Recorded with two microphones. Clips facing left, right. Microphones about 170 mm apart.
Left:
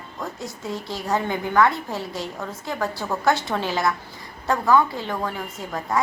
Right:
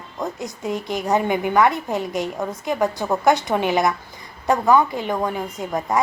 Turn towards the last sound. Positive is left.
turn(degrees=-20)  # may be behind; listen again after turning